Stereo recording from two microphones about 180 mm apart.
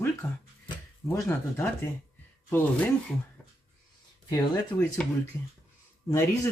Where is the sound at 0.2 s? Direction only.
10° left (ahead or behind).